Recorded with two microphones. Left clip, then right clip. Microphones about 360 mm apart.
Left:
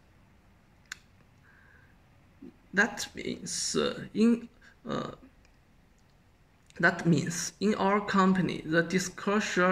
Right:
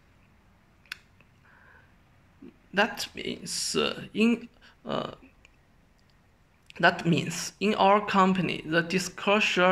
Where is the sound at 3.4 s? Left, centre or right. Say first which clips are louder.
Right 2 dB; right.